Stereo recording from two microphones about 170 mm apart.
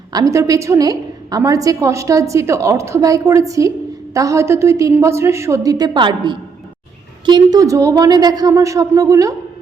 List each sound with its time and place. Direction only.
0.1 s a woman's voice: 20° right (ahead or behind)